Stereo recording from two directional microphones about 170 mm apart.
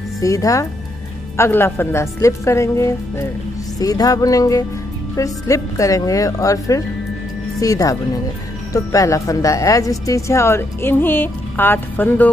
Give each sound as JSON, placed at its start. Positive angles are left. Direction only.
{"t": 0.2, "sound": "a woman's voice", "side_deg": 20}